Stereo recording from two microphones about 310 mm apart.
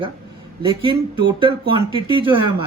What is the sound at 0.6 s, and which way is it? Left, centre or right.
Speech, centre.